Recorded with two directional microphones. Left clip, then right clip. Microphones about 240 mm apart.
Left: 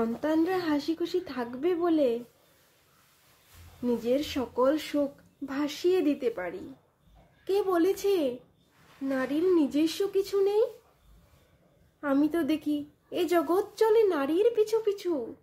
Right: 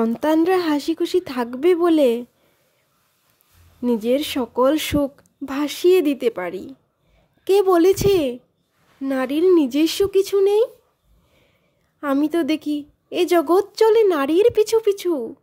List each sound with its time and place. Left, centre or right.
0.0 s speech: right
3.8 s a woman's voice: right
12.0 s a woman's voice: right